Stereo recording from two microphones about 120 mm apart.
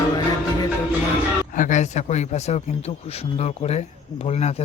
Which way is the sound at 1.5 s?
90° left.